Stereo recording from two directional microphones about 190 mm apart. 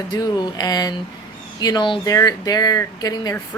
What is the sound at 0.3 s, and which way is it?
A woman's voice, 20° left (ahead or behind).